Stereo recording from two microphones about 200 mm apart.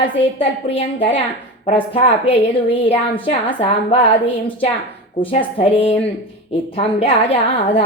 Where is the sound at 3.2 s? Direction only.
30° left (ahead or behind).